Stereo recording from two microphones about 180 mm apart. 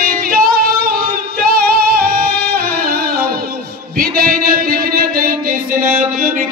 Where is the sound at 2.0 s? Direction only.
60° right (ahead or behind).